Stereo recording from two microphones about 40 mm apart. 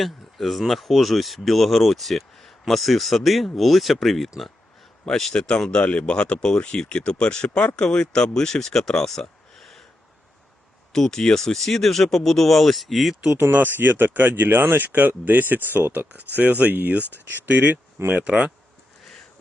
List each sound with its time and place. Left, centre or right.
0.0 s speech: centre
5.3 s speech: left; by 9.8 s centre
10.9 s speech: centre
13.4 s speech: right
15.9 s speech: right
17.0 s speech: left
17.2 s speech: right
18.3 s speech: right